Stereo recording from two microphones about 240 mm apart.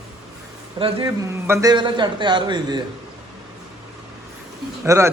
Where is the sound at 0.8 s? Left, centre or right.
Right.